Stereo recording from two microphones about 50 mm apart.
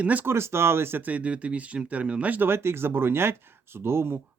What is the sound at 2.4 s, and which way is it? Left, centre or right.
Speech, right.